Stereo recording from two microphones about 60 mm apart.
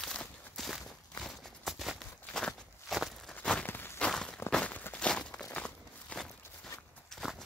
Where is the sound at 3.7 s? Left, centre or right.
Left.